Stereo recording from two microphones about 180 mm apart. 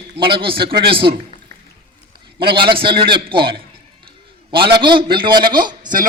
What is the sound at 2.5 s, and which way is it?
Speech, 30° right (ahead or behind).